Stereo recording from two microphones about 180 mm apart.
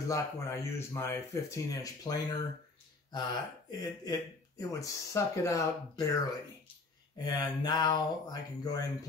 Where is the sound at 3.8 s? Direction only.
20° left (ahead or behind).